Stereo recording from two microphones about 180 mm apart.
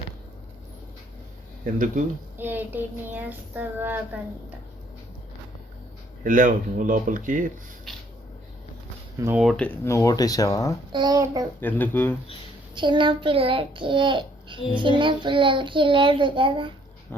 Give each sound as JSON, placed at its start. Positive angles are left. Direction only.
{"t": 1.6, "sound": "speech", "side_deg": -45}
{"t": 2.4, "sound": "child singing", "side_deg": -10}
{"t": 6.2, "sound": "speech", "side_deg": -45}
{"t": 9.2, "sound": "speech", "side_deg": -5}
{"t": 10.9, "sound": "child singing", "side_deg": -20}
{"t": 11.6, "sound": "speech", "side_deg": 10}
{"t": 12.7, "sound": "child singing", "side_deg": -25}